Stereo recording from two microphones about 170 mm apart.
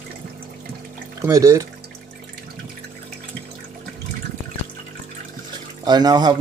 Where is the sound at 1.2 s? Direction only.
20° right (ahead or behind).